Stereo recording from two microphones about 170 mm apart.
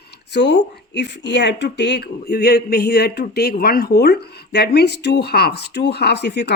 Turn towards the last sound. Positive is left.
turn(degrees=85)